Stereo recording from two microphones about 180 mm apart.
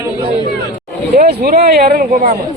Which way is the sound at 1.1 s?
65° right (ahead or behind).